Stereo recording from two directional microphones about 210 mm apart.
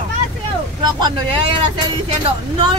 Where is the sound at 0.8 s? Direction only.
20° right (ahead or behind).